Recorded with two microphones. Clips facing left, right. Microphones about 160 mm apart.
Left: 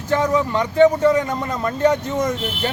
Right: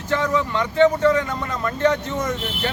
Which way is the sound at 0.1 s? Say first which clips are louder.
Left 3 dB; 15° left (ahead or behind).